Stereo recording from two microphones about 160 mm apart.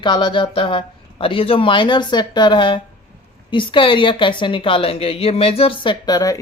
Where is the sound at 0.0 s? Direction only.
30° left (ahead or behind).